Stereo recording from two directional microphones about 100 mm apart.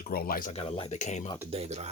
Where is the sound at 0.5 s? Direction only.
80° left.